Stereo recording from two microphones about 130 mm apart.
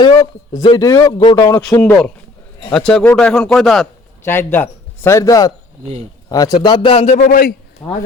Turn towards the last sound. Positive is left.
turn(degrees=45)  # may be behind; listen again after turning